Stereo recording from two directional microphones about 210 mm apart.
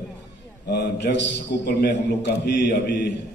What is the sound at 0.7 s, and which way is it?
A man's voice, 55° left (ahead or behind).